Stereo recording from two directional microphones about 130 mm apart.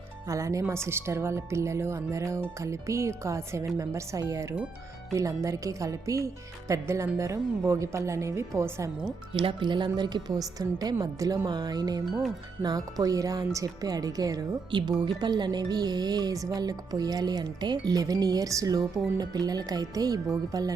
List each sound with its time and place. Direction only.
0.3 s speech: 25° right (ahead or behind)
9.3 s a woman's voice: 40° right (ahead or behind)